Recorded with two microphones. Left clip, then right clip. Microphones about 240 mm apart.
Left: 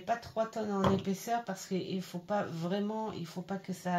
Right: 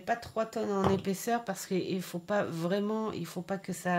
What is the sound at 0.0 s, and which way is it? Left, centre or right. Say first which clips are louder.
Speech: right 1 dB; right.